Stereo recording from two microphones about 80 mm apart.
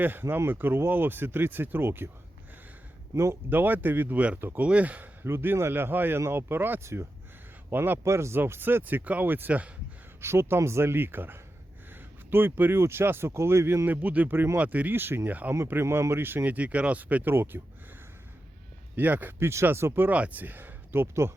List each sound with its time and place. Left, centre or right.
0.0 s speech: right
3.5 s speech: right
5.2 s speech: right
10.2 s speech: right
13.8 s speech: right
18.9 s speech: right